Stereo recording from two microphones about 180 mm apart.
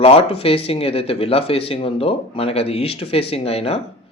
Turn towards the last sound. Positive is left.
turn(degrees=35)  # may be behind; listen again after turning